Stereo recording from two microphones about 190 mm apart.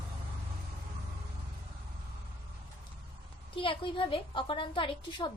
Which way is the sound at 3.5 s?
25° left (ahead or behind).